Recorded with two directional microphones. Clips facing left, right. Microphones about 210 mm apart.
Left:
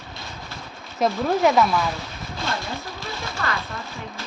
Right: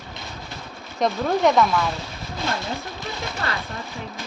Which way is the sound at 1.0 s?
5° left (ahead or behind).